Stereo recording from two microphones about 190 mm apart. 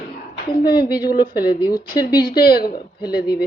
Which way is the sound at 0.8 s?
20° left (ahead or behind).